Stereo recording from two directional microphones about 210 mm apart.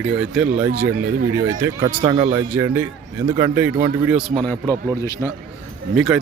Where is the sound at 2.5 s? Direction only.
10° right (ahead or behind).